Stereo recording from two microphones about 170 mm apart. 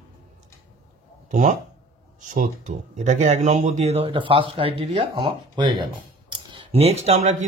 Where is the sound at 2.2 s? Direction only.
50° right (ahead or behind).